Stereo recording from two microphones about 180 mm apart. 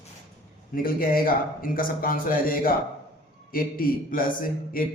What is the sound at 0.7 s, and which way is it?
A man's voice, 50° left (ahead or behind).